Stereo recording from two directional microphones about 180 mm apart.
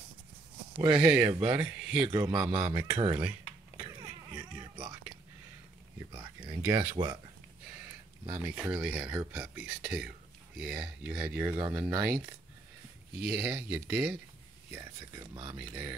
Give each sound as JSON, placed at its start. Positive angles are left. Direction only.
{"t": 0.7, "sound": "speech", "side_deg": -25}
{"t": 1.0, "sound": "speech", "side_deg": -5}
{"t": 1.3, "sound": "speech", "side_deg": -25}
{"t": 1.6, "sound": "speech", "side_deg": -5}
{"t": 2.0, "sound": "speech", "side_deg": -25}
{"t": 4.3, "sound": "a sound", "side_deg": -10}
{"t": 6.1, "sound": "a sound", "side_deg": -20}
{"t": 8.3, "sound": "speech", "side_deg": -10}
{"t": 13.2, "sound": "speech", "side_deg": -5}
{"t": 14.7, "sound": "speech", "side_deg": -20}
{"t": 15.5, "sound": "speech", "side_deg": -10}